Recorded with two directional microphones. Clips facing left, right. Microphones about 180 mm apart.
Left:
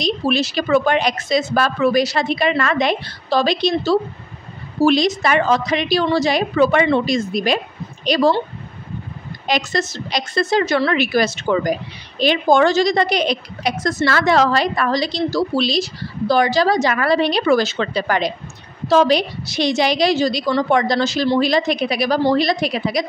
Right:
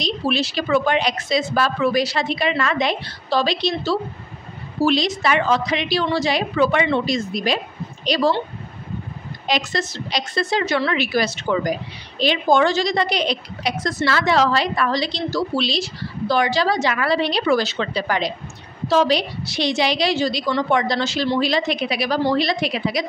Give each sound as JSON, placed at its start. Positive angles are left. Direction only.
{"t": 0.0, "sound": "a woman's voice", "side_deg": 45}
{"t": 9.5, "sound": "a woman's voice", "side_deg": 45}